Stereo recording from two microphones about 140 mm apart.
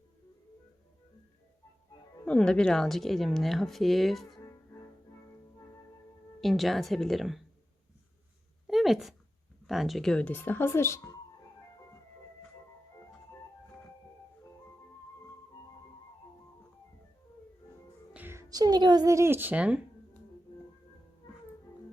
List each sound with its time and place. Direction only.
2.2 s a woman's voice: 5° left (ahead or behind)
6.4 s a woman's voice: centre (ahead or behind)
8.6 s a sound: centre (ahead or behind)
9.6 s speech: centre (ahead or behind); by 11.1 s 20° left (ahead or behind)
18.1 s a woman's voice: 15° right (ahead or behind)